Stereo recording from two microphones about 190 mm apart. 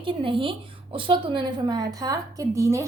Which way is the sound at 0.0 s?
25° right (ahead or behind).